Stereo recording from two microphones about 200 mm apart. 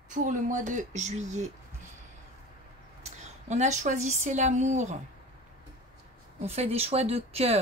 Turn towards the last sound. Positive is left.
turn(degrees=-30)  # may be behind; listen again after turning